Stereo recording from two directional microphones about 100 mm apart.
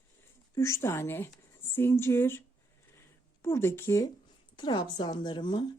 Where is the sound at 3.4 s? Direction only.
25° left (ahead or behind).